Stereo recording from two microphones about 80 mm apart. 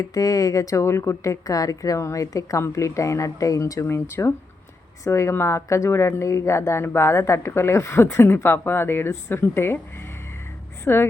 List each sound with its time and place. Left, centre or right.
0.0 s speech: left
10.8 s a woman's voice: left